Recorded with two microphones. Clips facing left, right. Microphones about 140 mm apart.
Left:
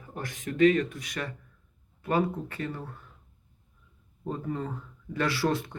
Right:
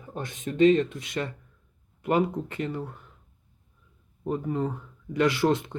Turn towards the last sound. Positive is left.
turn(degrees=-20)  # may be behind; listen again after turning